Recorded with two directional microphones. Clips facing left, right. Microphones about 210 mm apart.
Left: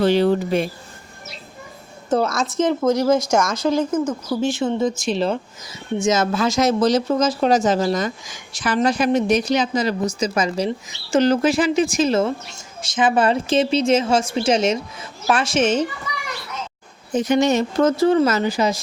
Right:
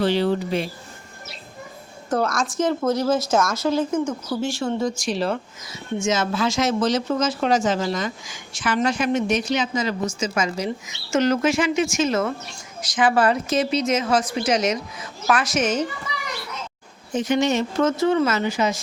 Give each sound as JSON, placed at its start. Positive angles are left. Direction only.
{"t": 0.0, "sound": "speech", "side_deg": 45}
{"t": 2.0, "sound": "a woman's voice", "side_deg": 25}
{"t": 6.0, "sound": "a woman's voice", "side_deg": 40}
{"t": 17.2, "sound": "a woman's voice", "side_deg": 40}